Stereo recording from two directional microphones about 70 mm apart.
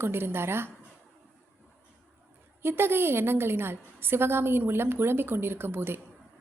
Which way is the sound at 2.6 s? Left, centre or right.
Right.